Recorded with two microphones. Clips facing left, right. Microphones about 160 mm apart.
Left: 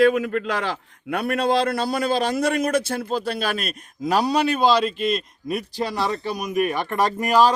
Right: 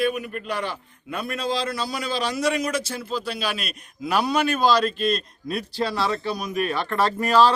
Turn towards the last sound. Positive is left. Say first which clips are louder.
# even
turn(degrees=15)  # may be behind; listen again after turning